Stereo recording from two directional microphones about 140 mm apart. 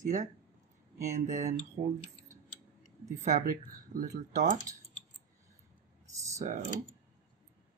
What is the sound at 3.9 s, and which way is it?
Speech, 75° right (ahead or behind).